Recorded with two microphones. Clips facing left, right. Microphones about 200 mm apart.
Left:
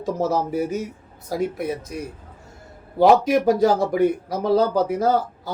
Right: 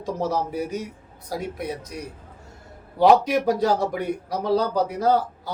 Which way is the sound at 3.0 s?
50° left (ahead or behind).